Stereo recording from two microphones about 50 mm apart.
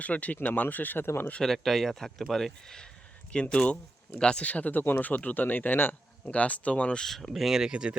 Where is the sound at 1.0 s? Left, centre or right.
Left.